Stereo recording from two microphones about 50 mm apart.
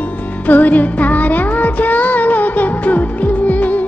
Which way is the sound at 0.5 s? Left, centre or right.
Left.